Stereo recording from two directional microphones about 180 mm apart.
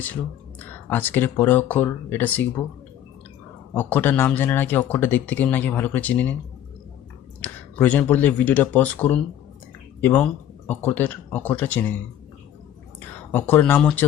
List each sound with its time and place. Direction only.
0.9 s speech: 10° left (ahead or behind)
3.8 s speech: 10° left (ahead or behind)
7.4 s speech: 10° left (ahead or behind)
13.3 s speech: 10° left (ahead or behind)